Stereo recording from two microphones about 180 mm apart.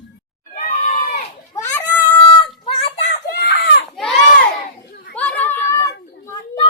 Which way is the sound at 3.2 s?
55° left (ahead or behind).